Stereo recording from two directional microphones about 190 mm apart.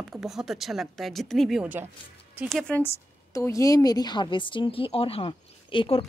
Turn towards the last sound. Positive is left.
turn(degrees=25)  # may be behind; listen again after turning